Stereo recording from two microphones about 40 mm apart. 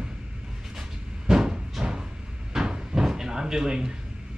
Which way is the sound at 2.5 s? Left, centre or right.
Centre.